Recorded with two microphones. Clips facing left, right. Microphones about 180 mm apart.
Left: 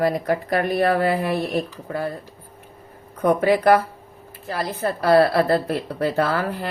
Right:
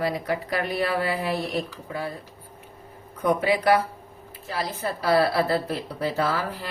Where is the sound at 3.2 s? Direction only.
55° left (ahead or behind).